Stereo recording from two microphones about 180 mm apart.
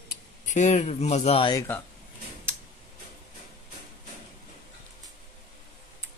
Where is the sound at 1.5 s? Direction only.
15° left (ahead or behind).